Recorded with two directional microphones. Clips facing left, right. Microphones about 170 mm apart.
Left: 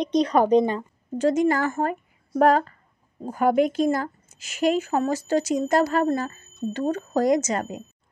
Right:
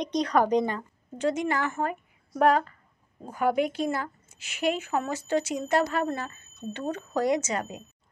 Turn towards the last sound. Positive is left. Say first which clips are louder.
# left 5 dB
turn(degrees=45)  # may be behind; listen again after turning